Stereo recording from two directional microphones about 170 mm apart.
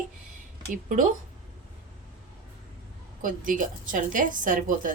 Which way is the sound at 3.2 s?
50° right (ahead or behind).